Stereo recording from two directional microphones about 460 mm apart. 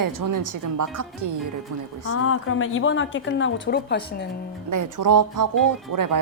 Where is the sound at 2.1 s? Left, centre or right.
Left.